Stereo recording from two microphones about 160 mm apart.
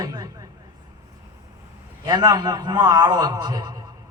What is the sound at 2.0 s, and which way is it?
A man's voice, 25° right (ahead or behind).